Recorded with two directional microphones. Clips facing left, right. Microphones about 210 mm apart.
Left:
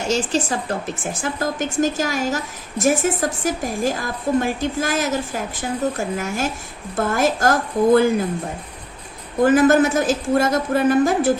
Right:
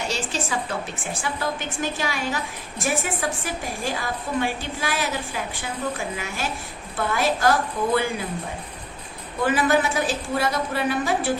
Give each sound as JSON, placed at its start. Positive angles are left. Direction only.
{"t": 0.0, "sound": "a woman's voice", "side_deg": 45}
{"t": 9.4, "sound": "a woman's voice", "side_deg": 45}